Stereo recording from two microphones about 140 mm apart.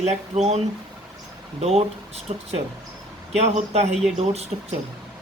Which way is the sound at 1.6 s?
50° right (ahead or behind).